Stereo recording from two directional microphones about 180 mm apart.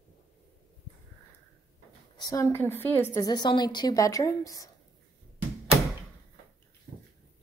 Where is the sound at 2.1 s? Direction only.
20° left (ahead or behind).